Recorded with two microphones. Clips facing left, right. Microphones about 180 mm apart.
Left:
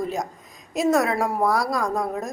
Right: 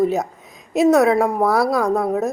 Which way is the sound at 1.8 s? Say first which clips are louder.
Right 6 dB; 60° right (ahead or behind).